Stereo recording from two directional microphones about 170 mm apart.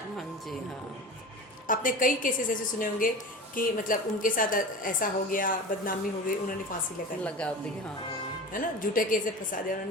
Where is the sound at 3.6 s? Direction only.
55° left (ahead or behind).